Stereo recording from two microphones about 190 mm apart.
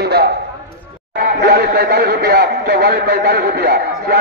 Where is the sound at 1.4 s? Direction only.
60° right (ahead or behind).